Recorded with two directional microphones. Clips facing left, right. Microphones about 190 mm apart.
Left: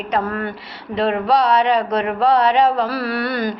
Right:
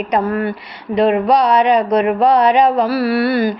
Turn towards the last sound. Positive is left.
turn(degrees=-5)  # may be behind; listen again after turning